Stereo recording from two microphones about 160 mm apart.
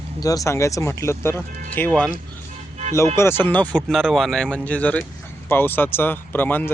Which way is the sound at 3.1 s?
15° left (ahead or behind).